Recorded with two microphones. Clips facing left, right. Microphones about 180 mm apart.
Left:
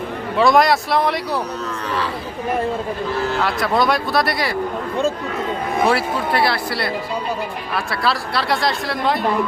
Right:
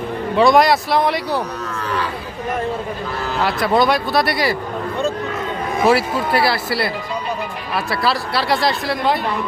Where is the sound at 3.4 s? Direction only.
Centre (ahead or behind).